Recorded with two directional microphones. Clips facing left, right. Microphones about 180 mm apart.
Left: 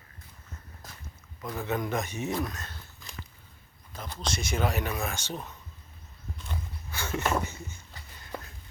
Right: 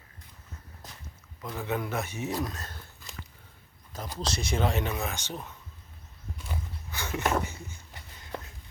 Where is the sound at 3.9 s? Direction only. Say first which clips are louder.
Right 1 dB; 40° right (ahead or behind); by 5.4 s 15° right (ahead or behind).